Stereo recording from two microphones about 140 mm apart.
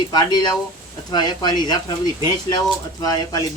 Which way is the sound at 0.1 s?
30° left (ahead or behind).